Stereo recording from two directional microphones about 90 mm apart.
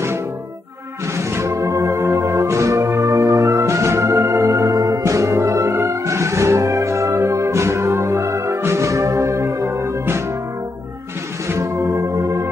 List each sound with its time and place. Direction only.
1.1 s music: 30° right (ahead or behind)
11.4 s music: 30° right (ahead or behind)